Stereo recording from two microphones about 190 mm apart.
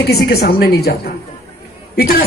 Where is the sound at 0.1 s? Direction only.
55° left (ahead or behind).